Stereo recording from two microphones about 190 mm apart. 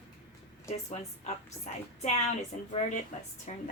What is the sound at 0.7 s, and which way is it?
A woman's voice, 35° left (ahead or behind).